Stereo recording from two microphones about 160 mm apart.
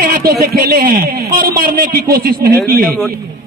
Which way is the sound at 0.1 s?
70° right (ahead or behind).